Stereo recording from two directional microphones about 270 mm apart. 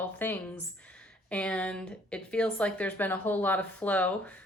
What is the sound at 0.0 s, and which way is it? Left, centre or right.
A woman's voice, centre.